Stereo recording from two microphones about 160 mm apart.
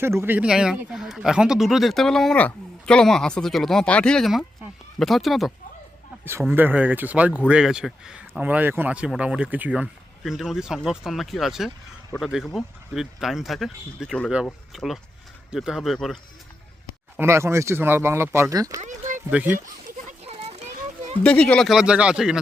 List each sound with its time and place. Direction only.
0.0 s speech: 15° right (ahead or behind); by 5.5 s centre (ahead or behind)
6.5 s speech: 10° right (ahead or behind)
17.2 s speech: 15° right (ahead or behind)
18.8 s speech: 50° right (ahead or behind)
19.3 s speech: 10° right (ahead or behind)
20.2 s children playing: 40° right (ahead or behind)
21.2 s speech: 5° left (ahead or behind)